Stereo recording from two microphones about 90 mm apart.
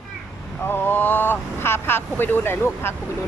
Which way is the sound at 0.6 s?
25° left (ahead or behind).